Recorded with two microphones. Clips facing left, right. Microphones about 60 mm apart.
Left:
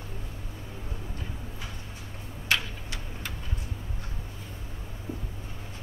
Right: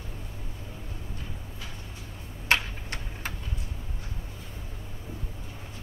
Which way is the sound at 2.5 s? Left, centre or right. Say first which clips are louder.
Right 3 dB; right.